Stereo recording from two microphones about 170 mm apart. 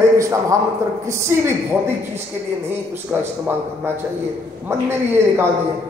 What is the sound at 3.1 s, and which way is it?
Speech, 5° right (ahead or behind).